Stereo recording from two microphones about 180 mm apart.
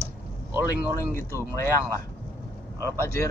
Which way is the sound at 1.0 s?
15° left (ahead or behind).